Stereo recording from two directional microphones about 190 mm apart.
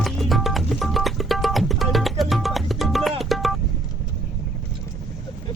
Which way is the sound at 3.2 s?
Centre (ahead or behind).